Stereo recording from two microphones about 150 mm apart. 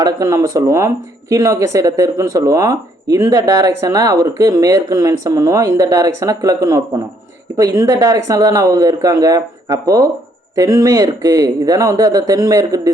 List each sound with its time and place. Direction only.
0.0 s speech: 20° right (ahead or behind)